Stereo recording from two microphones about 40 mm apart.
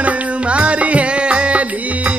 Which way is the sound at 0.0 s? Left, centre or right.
Right.